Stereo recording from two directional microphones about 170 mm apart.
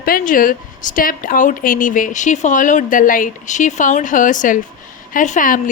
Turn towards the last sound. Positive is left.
turn(degrees=50)  # may be behind; listen again after turning